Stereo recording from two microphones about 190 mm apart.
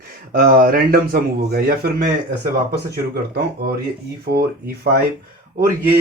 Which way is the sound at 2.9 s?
55° right (ahead or behind).